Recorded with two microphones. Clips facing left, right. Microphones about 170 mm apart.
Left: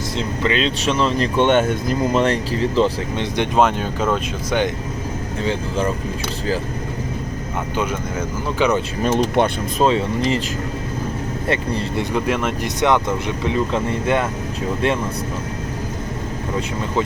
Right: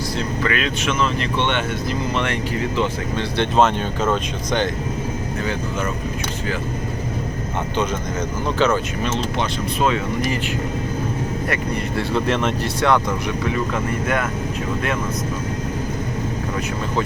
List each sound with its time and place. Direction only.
0.2 s speech: 20° left (ahead or behind)
3.2 s speech: 15° left (ahead or behind)
8.5 s speech: 15° left (ahead or behind)
9.1 s speech: 50° left (ahead or behind)
9.8 s speech: 25° left (ahead or behind)
11.4 s speech: 25° left (ahead or behind)
12.1 s speech: 10° left (ahead or behind)
12.6 s speech: 20° left (ahead or behind)